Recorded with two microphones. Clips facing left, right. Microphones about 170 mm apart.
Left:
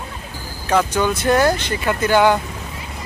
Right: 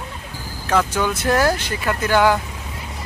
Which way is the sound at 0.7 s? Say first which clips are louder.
Left 2 dB; 5° right (ahead or behind).